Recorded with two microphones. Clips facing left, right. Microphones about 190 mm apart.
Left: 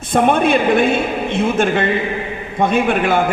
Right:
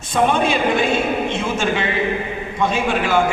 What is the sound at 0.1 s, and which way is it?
A man's voice, 55° left (ahead or behind).